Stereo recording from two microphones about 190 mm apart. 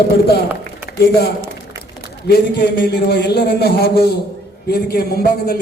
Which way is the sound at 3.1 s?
55° left (ahead or behind).